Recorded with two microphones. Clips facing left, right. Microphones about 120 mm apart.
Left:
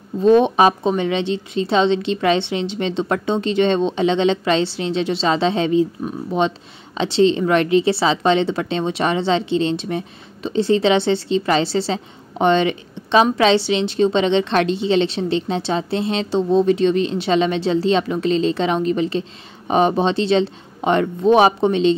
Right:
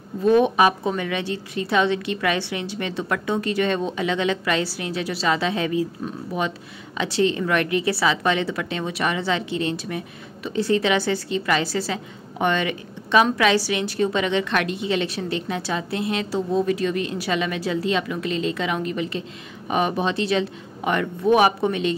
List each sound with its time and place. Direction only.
0.2 s a woman's voice: 25° left (ahead or behind)
7.0 s a woman's voice: 25° left (ahead or behind)